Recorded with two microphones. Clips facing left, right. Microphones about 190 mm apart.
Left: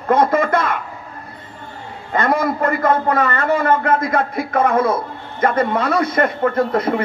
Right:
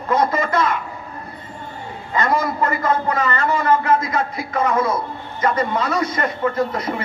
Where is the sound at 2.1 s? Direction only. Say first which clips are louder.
Left 2 dB; 55° left (ahead or behind).